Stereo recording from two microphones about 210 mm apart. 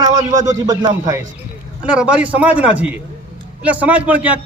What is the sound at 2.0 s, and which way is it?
A man's voice, 5° right (ahead or behind).